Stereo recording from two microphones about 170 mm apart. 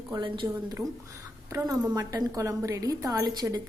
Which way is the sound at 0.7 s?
15° right (ahead or behind).